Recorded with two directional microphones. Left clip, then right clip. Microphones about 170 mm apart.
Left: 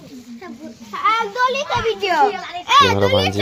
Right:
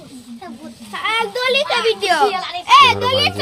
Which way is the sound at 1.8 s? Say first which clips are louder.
Left 2 dB; centre (ahead or behind).